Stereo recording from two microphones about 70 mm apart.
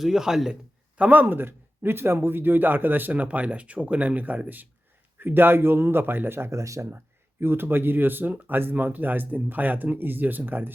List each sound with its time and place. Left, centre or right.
0.0 s a man's voice: centre
0.9 s speech: right
6.9 s speech: right